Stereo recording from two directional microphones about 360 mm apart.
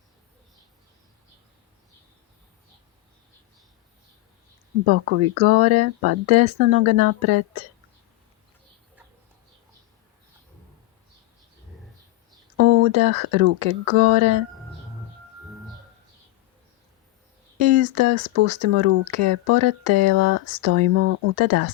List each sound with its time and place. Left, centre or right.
4.9 s speech: right
12.5 s speech: right
17.6 s a sound: right
17.8 s speech: right